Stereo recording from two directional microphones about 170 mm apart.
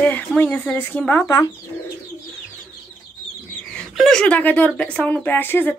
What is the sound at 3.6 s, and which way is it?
Speech, 5° left (ahead or behind).